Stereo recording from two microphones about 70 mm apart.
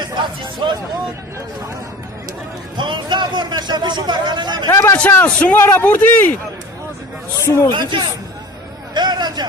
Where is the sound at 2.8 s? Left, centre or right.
Right.